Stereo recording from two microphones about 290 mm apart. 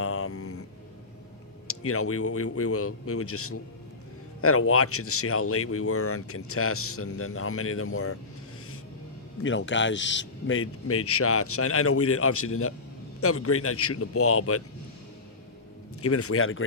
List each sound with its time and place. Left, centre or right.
0.0 s a sound: left
1.6 s speech: left
9.4 s speech: left
16.0 s speech: left